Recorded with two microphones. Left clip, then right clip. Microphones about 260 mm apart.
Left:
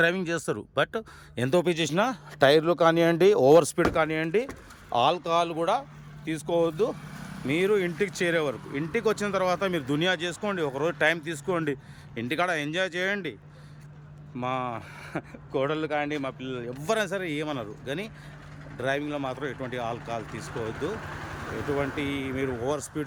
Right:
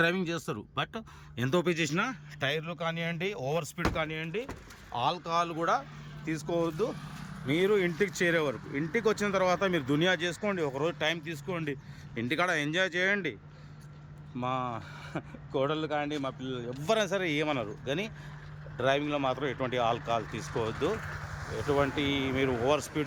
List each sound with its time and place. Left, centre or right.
0.0 s speech: centre
14.3 s speech: centre
21.8 s speech: centre